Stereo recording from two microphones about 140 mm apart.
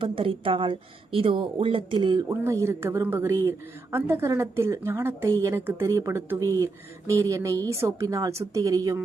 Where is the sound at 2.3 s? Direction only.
20° right (ahead or behind).